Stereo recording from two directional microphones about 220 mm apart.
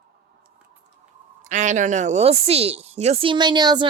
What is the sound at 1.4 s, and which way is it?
A woman's voice, 35° right (ahead or behind).